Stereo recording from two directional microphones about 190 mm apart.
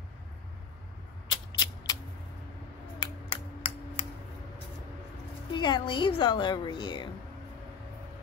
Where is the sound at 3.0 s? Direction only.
25° left (ahead or behind).